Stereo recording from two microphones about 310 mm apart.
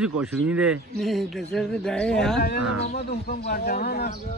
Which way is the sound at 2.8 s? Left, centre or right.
Left.